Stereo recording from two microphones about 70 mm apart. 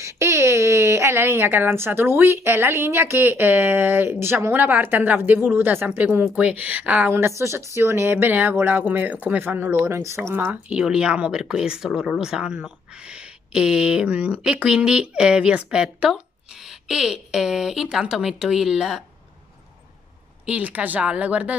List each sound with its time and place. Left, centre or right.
0.0 s speech: right
5.9 s speech: centre
7.1 s speech: right
9.8 s speech: right
10.7 s speech: centre
20.4 s speech: centre